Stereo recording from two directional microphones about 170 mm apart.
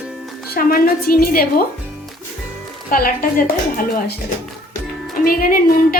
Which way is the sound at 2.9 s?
55° left (ahead or behind).